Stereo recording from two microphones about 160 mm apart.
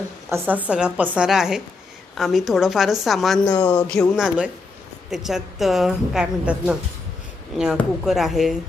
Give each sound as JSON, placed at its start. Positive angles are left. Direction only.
{"t": 0.3, "sound": "a woman's voice", "side_deg": -15}
{"t": 3.4, "sound": "speech", "side_deg": 25}
{"t": 3.8, "sound": "a woman's voice", "side_deg": 5}
{"t": 8.0, "sound": "a woman's voice", "side_deg": 0}